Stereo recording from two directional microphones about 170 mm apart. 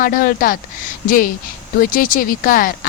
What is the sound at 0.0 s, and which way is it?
Speech, 55° left (ahead or behind).